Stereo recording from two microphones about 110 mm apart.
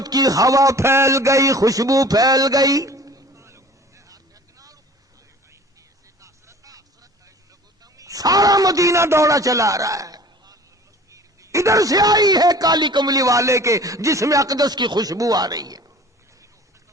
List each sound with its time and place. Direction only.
0.0 s a sound: 35° right (ahead or behind)
6.1 s vehicle: 30° right (ahead or behind)
7.9 s speech: 35° right (ahead or behind)